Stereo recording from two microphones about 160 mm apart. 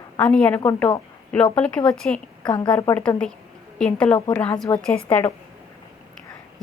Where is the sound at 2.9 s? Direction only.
5° left (ahead or behind).